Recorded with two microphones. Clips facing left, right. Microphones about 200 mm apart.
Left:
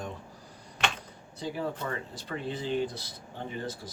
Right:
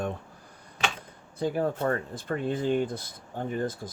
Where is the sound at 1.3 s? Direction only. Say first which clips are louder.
Right 6 dB; 50° right (ahead or behind).